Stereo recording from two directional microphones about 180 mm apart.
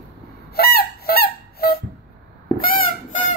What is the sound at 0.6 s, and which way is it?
Honk, 60° left (ahead or behind).